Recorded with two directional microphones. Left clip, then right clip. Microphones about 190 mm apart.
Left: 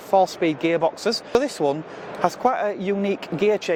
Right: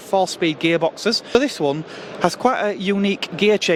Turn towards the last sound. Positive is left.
turn(degrees=-20)  # may be behind; listen again after turning